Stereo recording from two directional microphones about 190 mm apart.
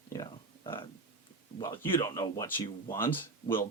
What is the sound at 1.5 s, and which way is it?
Speech, 25° left (ahead or behind).